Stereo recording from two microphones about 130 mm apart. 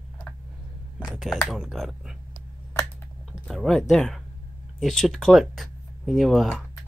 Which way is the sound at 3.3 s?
Centre (ahead or behind).